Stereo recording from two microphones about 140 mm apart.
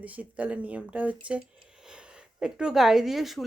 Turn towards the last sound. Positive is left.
turn(degrees=0)  # may be behind; listen again after turning